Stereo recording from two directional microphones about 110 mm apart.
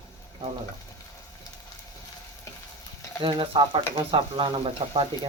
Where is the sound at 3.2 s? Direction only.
55° right (ahead or behind).